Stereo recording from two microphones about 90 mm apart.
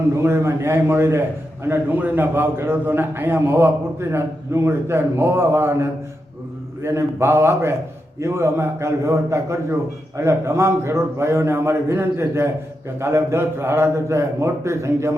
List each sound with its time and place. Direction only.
0.2 s a man's voice: 30° right (ahead or behind)